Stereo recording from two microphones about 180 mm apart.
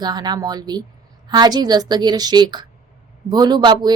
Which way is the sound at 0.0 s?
25° right (ahead or behind).